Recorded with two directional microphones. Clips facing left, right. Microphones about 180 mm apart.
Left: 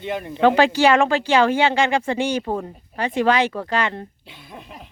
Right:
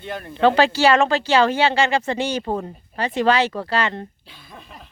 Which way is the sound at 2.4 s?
Centre (ahead or behind).